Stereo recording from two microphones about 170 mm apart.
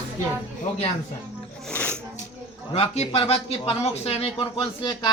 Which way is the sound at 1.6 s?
5° left (ahead or behind).